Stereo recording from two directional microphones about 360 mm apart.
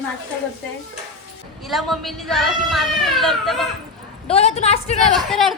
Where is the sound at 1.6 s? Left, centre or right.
Centre.